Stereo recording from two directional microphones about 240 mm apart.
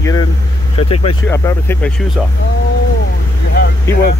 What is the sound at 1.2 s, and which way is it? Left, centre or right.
Speech, centre.